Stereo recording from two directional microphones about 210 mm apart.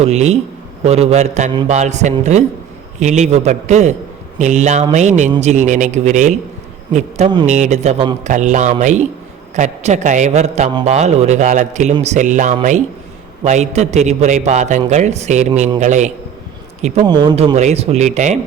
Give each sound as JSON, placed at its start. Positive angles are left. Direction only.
{"t": 0.0, "sound": "a man's voice", "side_deg": -30}
{"t": 7.4, "sound": "a man's voice", "side_deg": -35}
{"t": 17.1, "sound": "a man's voice", "side_deg": -20}